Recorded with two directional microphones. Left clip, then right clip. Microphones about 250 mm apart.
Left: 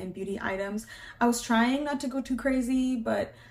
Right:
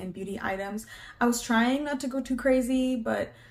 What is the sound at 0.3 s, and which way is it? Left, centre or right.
Speech, centre.